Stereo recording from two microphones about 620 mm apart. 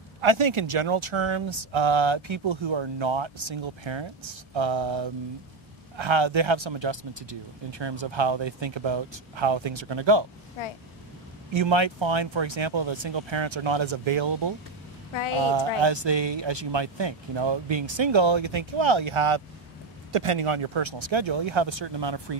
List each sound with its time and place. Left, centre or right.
0.2 s speech: right
11.5 s speech: right